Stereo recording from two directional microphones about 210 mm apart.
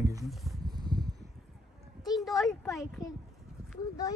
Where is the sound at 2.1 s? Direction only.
Centre (ahead or behind).